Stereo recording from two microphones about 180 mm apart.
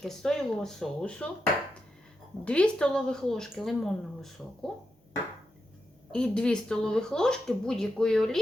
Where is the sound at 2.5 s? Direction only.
5° left (ahead or behind).